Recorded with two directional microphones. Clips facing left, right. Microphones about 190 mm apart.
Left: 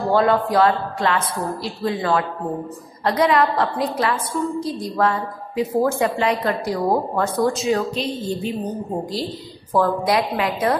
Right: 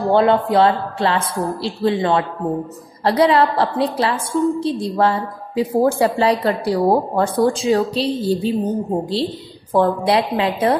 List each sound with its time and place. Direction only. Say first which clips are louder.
0.1 s a woman's voice: right 3 dB; 25° right (ahead or behind)
9.8 s speech: right 3 dB; 25° right (ahead or behind)